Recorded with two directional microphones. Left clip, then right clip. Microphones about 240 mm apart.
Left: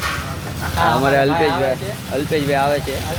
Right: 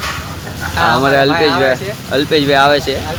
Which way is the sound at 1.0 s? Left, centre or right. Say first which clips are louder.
Right 4 dB; centre.